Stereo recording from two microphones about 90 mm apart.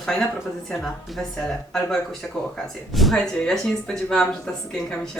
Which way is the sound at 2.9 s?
Centre (ahead or behind).